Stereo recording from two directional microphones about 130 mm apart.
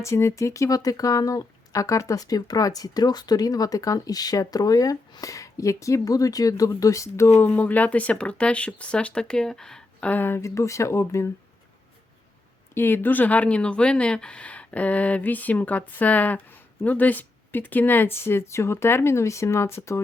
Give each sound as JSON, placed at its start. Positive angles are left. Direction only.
{"t": 0.0, "sound": "speech", "side_deg": 20}
{"t": 7.3, "sound": "speech", "side_deg": 15}
{"t": 12.7, "sound": "speech", "side_deg": 15}